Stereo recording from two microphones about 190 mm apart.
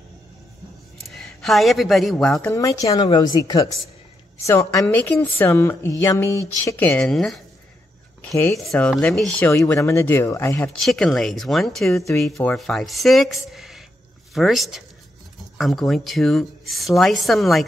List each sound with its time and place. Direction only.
1.0 s speech: centre (ahead or behind)
2.5 s a woman's voice: 15° left (ahead or behind); by 7.4 s centre (ahead or behind)
8.2 s speech: 15° left (ahead or behind)